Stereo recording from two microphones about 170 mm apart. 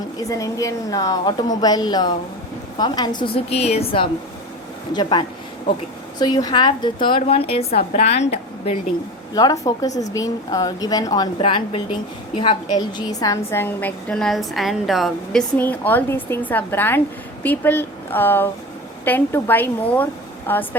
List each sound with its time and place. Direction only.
0.3 s a woman's voice: 20° left (ahead or behind); by 8.4 s 40° left (ahead or behind)
9.3 s a woman's voice: 20° left (ahead or behind)